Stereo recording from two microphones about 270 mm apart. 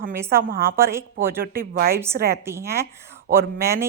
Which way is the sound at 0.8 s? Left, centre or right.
Centre.